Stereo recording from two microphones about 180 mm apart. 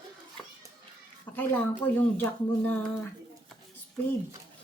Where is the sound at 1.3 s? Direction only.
10° left (ahead or behind).